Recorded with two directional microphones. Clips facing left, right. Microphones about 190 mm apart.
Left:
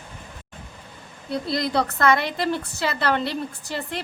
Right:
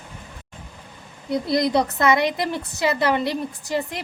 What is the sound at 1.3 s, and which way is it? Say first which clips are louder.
A woman's voice: right 4 dB; 20° right (ahead or behind).